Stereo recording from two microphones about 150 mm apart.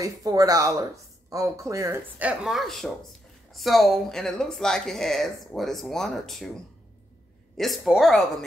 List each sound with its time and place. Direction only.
0.0 s speech: 25° right (ahead or behind); by 8.5 s 5° left (ahead or behind)